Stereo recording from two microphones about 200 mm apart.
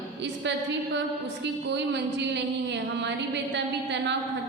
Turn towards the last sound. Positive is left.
turn(degrees=-60)  # may be behind; listen again after turning